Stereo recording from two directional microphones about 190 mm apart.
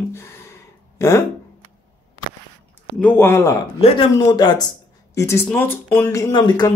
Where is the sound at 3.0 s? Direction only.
10° left (ahead or behind).